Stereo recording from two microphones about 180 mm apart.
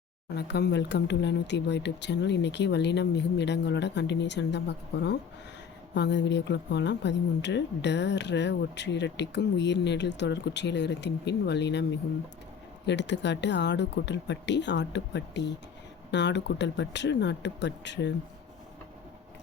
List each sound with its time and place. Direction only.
0.3 s speech: 65° left (ahead or behind)